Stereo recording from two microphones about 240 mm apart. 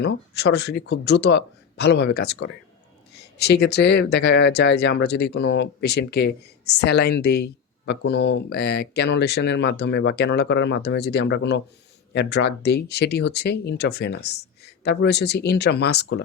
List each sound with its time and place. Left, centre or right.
0.0 s speech: left